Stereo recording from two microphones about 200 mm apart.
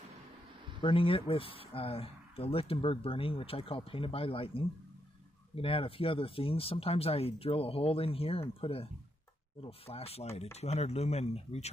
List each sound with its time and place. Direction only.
0.7 s speech: 25° left (ahead or behind)